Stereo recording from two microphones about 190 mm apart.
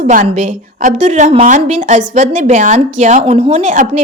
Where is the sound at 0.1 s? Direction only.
45° right (ahead or behind).